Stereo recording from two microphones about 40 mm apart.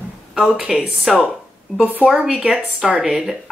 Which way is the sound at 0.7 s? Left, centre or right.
Centre.